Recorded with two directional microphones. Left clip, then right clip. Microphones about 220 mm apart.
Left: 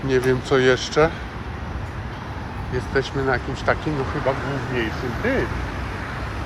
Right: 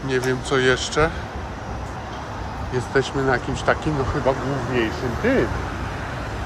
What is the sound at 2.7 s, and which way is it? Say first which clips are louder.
Speech: right 2 dB; 20° right (ahead or behind).